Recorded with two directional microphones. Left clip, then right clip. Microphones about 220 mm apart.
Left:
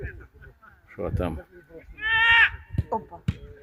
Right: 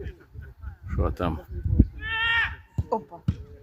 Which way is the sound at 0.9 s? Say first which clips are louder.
Right 1 dB; 5° right (ahead or behind).